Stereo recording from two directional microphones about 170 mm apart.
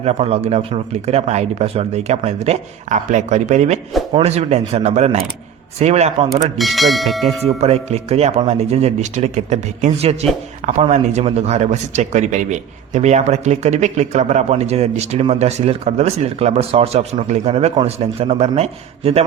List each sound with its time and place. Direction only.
0.0 s speech: 35° right (ahead or behind)
6.3 s speech: centre (ahead or behind)
7.4 s speech: 40° right (ahead or behind)